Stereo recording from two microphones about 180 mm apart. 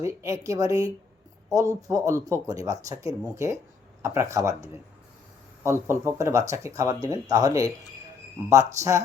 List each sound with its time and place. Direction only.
0.0 s speech: 15° right (ahead or behind)